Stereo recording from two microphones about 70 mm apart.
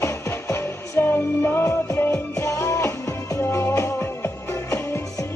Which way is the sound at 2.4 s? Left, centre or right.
Left.